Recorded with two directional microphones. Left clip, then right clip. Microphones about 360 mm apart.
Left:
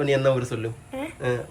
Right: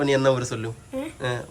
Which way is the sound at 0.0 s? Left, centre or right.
Centre.